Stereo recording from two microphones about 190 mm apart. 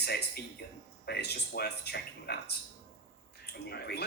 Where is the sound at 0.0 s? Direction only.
60° left (ahead or behind).